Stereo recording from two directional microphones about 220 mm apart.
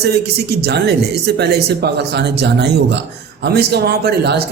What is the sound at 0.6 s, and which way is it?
Speech, 50° right (ahead or behind).